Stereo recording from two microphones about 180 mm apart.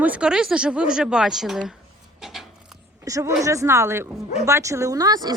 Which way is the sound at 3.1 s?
15° right (ahead or behind).